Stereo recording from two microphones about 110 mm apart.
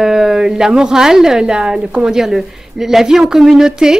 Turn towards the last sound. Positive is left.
turn(degrees=-5)  # may be behind; listen again after turning